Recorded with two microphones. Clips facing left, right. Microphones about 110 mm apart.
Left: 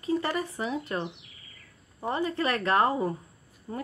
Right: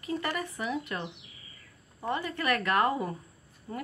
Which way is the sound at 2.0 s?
30° left (ahead or behind).